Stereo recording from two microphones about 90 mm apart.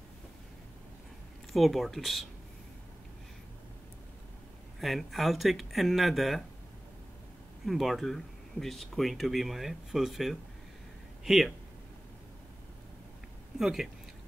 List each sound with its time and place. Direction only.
1.5 s speech: centre (ahead or behind)
4.7 s speech: centre (ahead or behind)
7.6 s speech: centre (ahead or behind)
13.6 s speech: 5° right (ahead or behind)